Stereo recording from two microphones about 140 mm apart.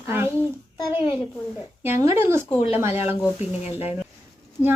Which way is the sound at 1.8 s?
20° right (ahead or behind).